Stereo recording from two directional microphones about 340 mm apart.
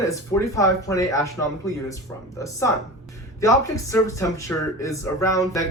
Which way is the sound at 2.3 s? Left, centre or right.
Centre.